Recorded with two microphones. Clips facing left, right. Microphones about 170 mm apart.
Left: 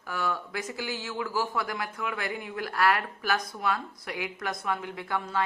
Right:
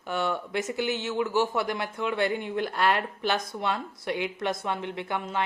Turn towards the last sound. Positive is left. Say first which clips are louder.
# right 1 dB
turn(degrees=-20)  # may be behind; listen again after turning